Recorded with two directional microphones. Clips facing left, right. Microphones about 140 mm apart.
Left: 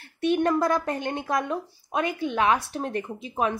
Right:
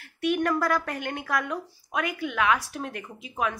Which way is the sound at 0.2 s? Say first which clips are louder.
Left 3 dB; 25° left (ahead or behind).